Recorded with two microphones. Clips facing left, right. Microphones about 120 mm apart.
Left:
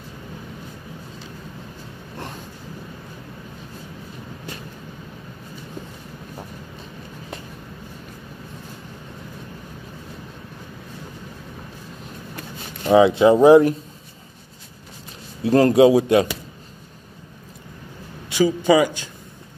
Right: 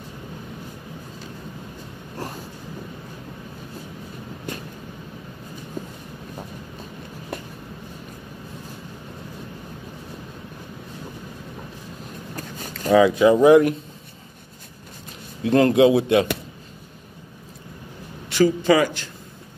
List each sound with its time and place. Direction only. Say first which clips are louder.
12.4 s a sound: right 2 dB; 45° right (ahead or behind)
12.9 s speech: left 2 dB; 25° left (ahead or behind)
15.4 s speech: left 2 dB; 35° left (ahead or behind)
18.3 s a man's voice: left 1 dB; 15° left (ahead or behind)